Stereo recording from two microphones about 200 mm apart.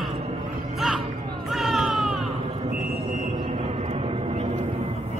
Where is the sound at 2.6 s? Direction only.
35° right (ahead or behind).